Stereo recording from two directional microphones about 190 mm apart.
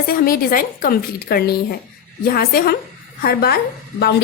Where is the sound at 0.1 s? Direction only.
50° left (ahead or behind).